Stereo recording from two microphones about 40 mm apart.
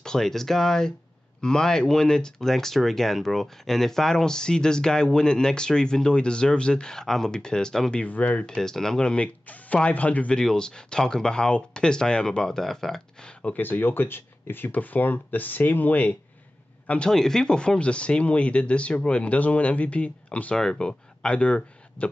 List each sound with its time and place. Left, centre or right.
0.0 s speech: centre
8.1 s speech: left
8.5 s speech: centre
9.0 s speech: left
10.3 s speech: centre
12.4 s speech: centre
13.6 s speech: left
14.7 s speech: left
16.8 s speech: left
17.1 s speech: centre; by 20.5 s left
20.5 s speech: centre; by 22.1 s left